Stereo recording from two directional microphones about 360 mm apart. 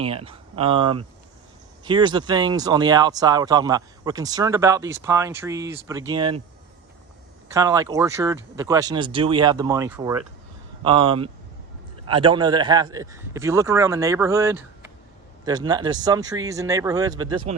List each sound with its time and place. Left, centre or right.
0.0 s speech: centre
7.5 s speech: centre